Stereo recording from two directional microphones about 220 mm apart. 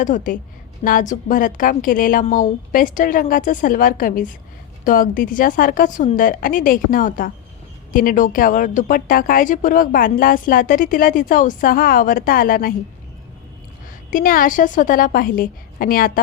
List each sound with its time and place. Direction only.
0.0 s speech: 35° left (ahead or behind)
14.1 s speech: 40° left (ahead or behind)